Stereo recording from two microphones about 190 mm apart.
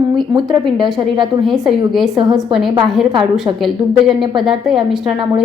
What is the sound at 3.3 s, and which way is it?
A woman's voice, centre (ahead or behind).